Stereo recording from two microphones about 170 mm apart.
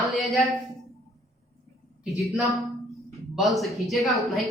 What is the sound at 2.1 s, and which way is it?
A woman's voice, centre (ahead or behind).